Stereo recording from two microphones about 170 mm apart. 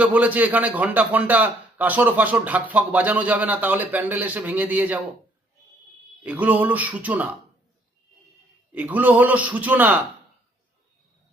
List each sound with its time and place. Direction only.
0.0 s a man's voice: 10° right (ahead or behind)
6.2 s a man's voice: 10° right (ahead or behind)
8.7 s a man's voice: 10° right (ahead or behind)